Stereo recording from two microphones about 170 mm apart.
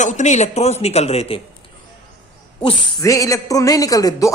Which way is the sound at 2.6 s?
30° left (ahead or behind).